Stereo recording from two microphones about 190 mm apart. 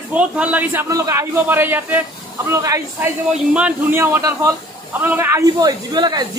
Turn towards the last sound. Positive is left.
turn(degrees=-20)  # may be behind; listen again after turning